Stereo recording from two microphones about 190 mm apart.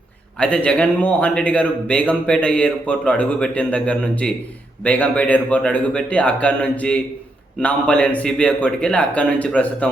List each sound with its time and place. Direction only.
0.3 s a man's voice: 5° left (ahead or behind)